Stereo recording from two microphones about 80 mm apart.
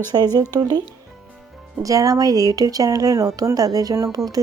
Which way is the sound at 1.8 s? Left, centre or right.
Right.